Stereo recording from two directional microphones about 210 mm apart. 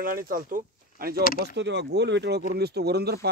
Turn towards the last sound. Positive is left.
turn(degrees=-50)  # may be behind; listen again after turning